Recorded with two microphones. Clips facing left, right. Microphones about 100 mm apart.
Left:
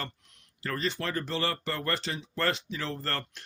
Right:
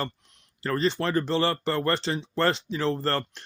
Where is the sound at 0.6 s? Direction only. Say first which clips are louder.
Right 7 dB; 30° right (ahead or behind).